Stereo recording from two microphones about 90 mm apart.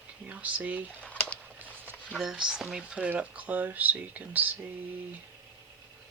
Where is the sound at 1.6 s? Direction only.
20° right (ahead or behind).